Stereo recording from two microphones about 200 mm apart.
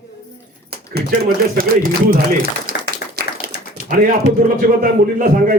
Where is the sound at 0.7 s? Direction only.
50° right (ahead or behind).